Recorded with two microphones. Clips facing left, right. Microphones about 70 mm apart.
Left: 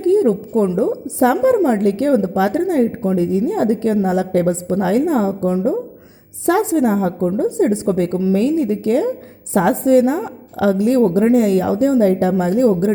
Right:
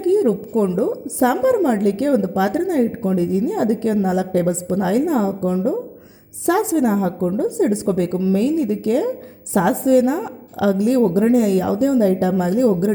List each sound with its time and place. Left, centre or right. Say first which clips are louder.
0.0 s a woman's voice: left 2 dB; left